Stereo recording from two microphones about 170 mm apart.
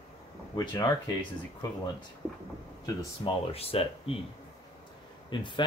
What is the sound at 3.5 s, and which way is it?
Speech, 35° left (ahead or behind).